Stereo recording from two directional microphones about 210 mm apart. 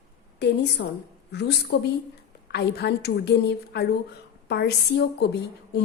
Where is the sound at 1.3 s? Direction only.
50° left (ahead or behind).